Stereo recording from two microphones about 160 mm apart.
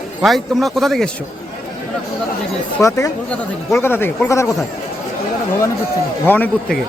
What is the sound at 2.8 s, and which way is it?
A man's voice, 20° left (ahead or behind).